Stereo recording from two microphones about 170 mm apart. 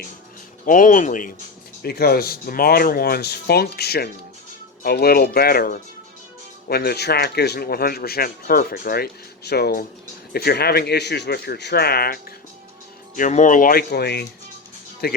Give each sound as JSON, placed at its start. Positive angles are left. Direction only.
{"t": 0.6, "sound": "speech", "side_deg": 50}
{"t": 1.8, "sound": "speech", "side_deg": 65}
{"t": 13.1, "sound": "speech", "side_deg": 45}